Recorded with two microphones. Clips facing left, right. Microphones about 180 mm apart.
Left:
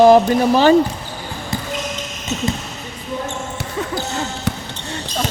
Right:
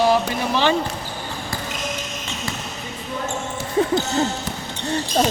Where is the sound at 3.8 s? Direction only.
30° right (ahead or behind).